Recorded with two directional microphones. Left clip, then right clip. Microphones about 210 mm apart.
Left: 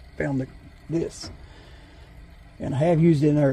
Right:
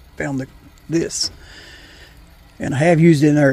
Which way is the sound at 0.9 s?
40° right (ahead or behind).